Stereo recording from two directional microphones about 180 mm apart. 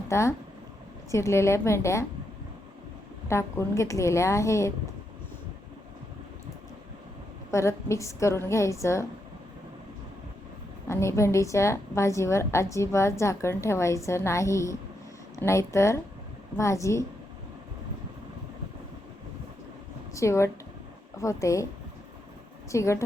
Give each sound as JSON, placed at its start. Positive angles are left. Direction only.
{"t": 0.1, "sound": "a woman's voice", "side_deg": 15}
{"t": 3.2, "sound": "a woman's voice", "side_deg": 15}
{"t": 7.5, "sound": "a woman's voice", "side_deg": 15}
{"t": 10.8, "sound": "a woman's voice", "side_deg": 15}
{"t": 20.1, "sound": "a woman's voice", "side_deg": 15}
{"t": 22.7, "sound": "a woman's voice", "side_deg": 15}